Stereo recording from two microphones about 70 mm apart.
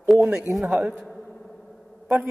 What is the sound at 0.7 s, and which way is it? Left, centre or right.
Speech, centre.